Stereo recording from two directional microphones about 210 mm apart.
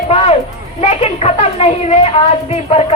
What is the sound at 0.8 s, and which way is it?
A child's voice, 30° left (ahead or behind).